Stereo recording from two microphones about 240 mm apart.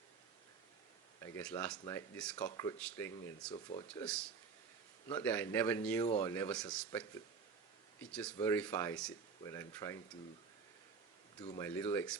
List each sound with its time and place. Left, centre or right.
1.5 s speech: centre
3.5 s speech: left
4.0 s speech: centre
11.3 s speech: centre